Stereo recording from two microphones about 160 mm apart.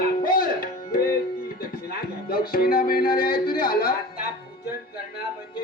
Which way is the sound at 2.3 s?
65° left (ahead or behind).